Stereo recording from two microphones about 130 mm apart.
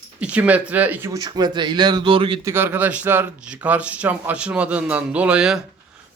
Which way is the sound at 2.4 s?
15° right (ahead or behind).